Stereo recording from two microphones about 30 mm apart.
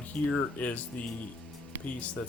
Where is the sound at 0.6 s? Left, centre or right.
Left.